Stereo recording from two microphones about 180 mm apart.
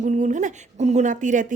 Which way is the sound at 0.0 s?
40° right (ahead or behind).